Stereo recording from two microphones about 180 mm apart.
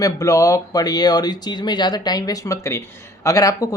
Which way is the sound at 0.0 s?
20° left (ahead or behind).